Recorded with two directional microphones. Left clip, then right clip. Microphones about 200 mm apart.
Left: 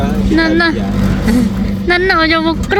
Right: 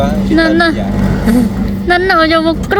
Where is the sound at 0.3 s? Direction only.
20° right (ahead or behind).